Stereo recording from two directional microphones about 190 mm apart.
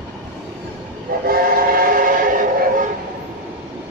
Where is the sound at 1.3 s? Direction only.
50° right (ahead or behind).